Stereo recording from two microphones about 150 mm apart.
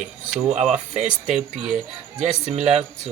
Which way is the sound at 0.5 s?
50° right (ahead or behind).